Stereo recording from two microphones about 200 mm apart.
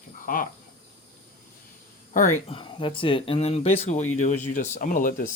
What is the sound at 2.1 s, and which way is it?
Speech, 40° left (ahead or behind).